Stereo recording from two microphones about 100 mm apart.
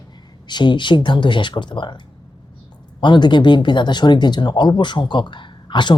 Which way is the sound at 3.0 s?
50° left (ahead or behind).